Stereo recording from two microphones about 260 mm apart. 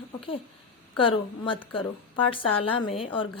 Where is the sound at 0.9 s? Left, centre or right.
Centre.